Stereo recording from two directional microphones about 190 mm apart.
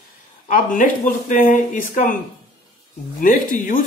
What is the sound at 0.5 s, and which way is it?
Speech, 45° left (ahead or behind).